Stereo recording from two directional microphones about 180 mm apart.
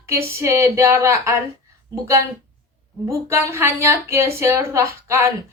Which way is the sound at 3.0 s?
15° right (ahead or behind).